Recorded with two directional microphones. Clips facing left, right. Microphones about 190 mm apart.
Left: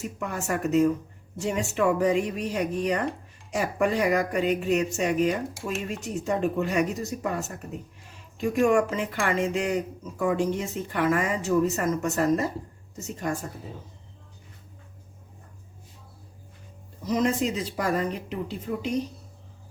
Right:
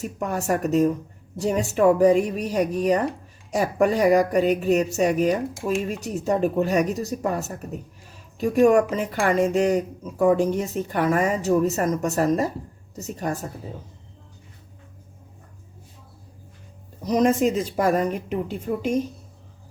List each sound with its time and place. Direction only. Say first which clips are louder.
0.0 s speech: right 5 dB; 40° right (ahead or behind)
17.1 s speech: right 5 dB; 45° right (ahead or behind)